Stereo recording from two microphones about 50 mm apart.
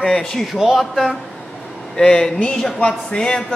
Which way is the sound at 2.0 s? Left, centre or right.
Centre.